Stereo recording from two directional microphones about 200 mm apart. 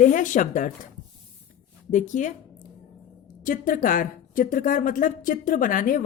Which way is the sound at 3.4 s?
40° left (ahead or behind).